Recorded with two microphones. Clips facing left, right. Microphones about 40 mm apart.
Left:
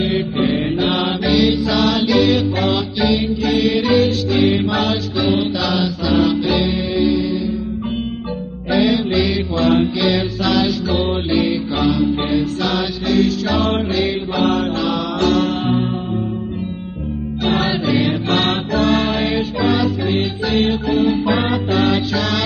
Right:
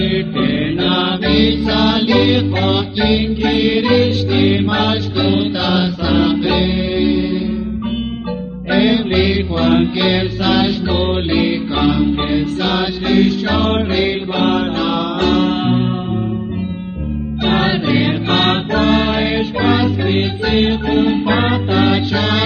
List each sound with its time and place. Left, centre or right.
0.0 s mantra: right
3.4 s music: right
8.7 s mantra: right
9.8 s music: right
17.5 s music: right